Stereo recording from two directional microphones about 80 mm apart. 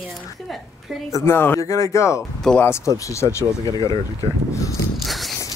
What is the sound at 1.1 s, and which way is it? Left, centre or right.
Speech, left.